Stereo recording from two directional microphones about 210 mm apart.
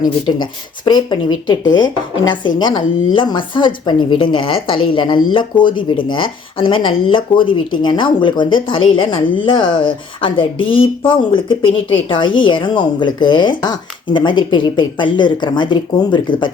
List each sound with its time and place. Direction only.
0.0 s speech: 20° left (ahead or behind)